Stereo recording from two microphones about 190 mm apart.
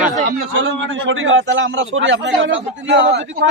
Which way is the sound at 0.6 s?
90° right.